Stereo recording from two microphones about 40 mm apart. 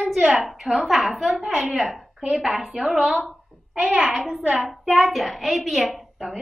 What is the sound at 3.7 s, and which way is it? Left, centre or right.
Speech, right.